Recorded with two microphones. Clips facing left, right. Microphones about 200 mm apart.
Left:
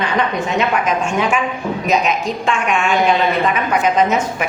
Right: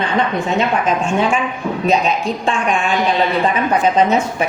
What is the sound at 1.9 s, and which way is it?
A woman's voice, 30° right (ahead or behind).